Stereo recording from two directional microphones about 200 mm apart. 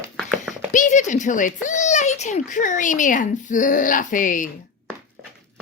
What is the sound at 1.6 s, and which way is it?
A child's voice, 35° left (ahead or behind).